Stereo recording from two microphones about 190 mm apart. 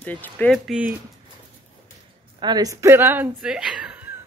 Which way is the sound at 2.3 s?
20° right (ahead or behind).